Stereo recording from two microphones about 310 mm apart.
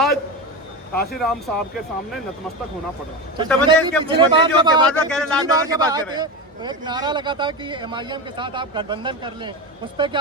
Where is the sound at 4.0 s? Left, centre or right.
Centre.